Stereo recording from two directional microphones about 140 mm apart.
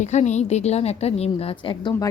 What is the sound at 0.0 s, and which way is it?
A woman's voice, 55° left (ahead or behind).